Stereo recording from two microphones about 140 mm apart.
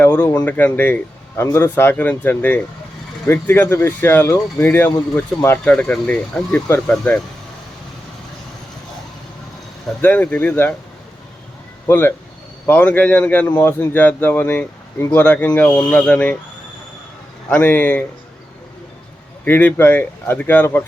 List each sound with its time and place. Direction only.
0.0 s a man's voice: 10° left (ahead or behind)
10.0 s a man's voice: 10° left (ahead or behind)
11.9 s a man's voice: 15° left (ahead or behind)
17.5 s a man's voice: 15° left (ahead or behind)
19.5 s a man's voice: 15° left (ahead or behind)